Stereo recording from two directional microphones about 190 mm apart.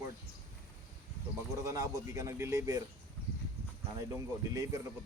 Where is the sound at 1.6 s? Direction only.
15° right (ahead or behind).